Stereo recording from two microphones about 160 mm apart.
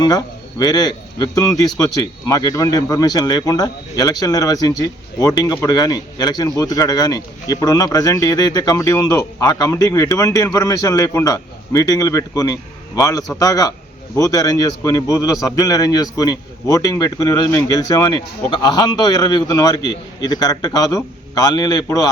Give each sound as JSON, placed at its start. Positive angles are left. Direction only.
{"t": 0.0, "sound": "a man's voice", "side_deg": 25}